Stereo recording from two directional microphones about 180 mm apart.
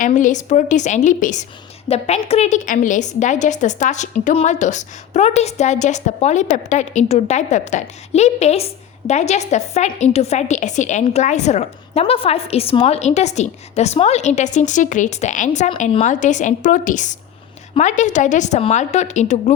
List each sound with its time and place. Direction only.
0.0 s a woman's voice: 45° left (ahead or behind)